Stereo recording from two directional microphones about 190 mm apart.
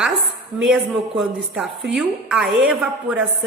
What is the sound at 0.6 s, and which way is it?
A woman's voice, 5° right (ahead or behind).